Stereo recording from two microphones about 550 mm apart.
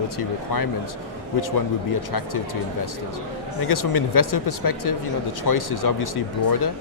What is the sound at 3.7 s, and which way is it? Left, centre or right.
Speech, left.